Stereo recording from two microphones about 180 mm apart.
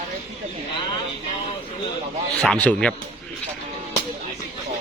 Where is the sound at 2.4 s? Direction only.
5° left (ahead or behind).